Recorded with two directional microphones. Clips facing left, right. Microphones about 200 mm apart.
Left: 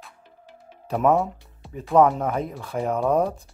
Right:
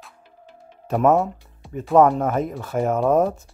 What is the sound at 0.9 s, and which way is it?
Speech, centre (ahead or behind).